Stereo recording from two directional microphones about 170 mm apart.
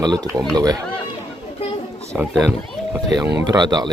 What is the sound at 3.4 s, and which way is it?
Speech, 25° right (ahead or behind).